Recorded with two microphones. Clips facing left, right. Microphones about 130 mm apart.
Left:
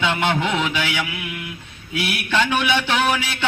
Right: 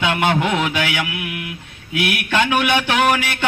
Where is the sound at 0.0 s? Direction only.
50° right (ahead or behind).